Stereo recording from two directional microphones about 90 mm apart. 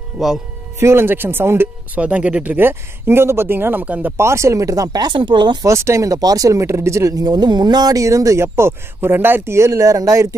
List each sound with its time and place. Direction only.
0.2 s speech: 5° right (ahead or behind)
0.7 s speech: 30° right (ahead or behind)
2.0 s speech: 15° right (ahead or behind)
4.2 s speech: 30° right (ahead or behind); by 5.7 s 55° right (ahead or behind)
5.7 s speech: 35° right (ahead or behind)